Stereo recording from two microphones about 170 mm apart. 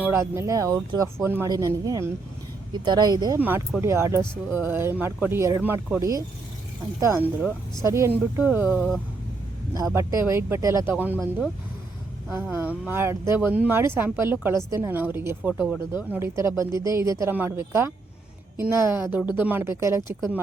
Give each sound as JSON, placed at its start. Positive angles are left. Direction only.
{"t": 0.0, "sound": "speech", "side_deg": -15}
{"t": 3.3, "sound": "speech", "side_deg": -15}
{"t": 7.8, "sound": "speech", "side_deg": -15}